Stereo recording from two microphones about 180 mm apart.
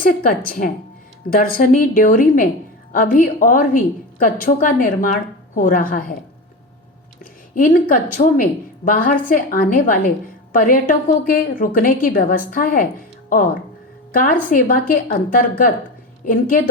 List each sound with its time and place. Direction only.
0.0 s a woman's voice: 50° left (ahead or behind)
7.5 s a woman's voice: 50° left (ahead or behind)
14.1 s a woman's voice: 50° left (ahead or behind)